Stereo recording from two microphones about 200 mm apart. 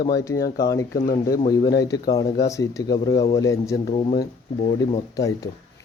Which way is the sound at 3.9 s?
25° left (ahead or behind).